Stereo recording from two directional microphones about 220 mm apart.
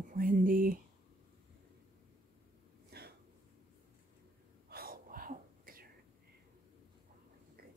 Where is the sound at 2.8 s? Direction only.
45° right (ahead or behind).